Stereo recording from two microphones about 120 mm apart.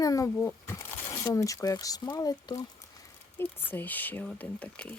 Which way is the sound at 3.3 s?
15° left (ahead or behind).